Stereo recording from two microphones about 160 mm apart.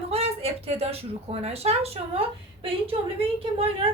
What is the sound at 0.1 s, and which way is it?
Speech, 40° right (ahead or behind).